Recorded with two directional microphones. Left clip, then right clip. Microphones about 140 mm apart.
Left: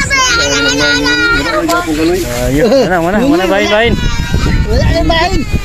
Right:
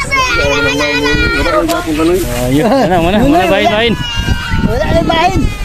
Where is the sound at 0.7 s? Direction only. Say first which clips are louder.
Left 2 dB; 20° left (ahead or behind).